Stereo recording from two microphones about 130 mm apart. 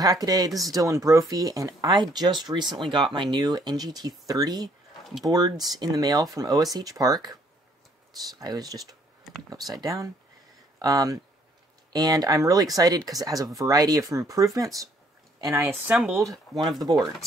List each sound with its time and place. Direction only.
0.0 s speech: 30° right (ahead or behind)
15.9 s speech: 5° right (ahead or behind)